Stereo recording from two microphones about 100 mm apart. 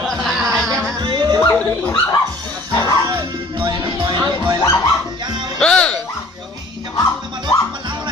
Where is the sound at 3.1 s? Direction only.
50° right (ahead or behind).